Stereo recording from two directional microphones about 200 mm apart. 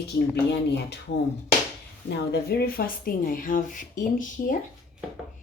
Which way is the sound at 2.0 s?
55° left (ahead or behind).